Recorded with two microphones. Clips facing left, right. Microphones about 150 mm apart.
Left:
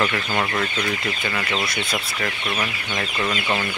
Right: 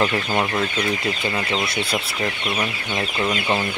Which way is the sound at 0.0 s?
20° right (ahead or behind).